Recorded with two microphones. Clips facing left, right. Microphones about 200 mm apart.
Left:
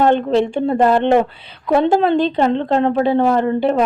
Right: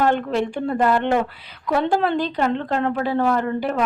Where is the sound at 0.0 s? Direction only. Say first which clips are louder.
Left 6 dB; 25° left (ahead or behind).